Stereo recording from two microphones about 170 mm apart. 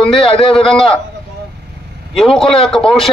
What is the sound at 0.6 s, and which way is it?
Speech, centre (ahead or behind).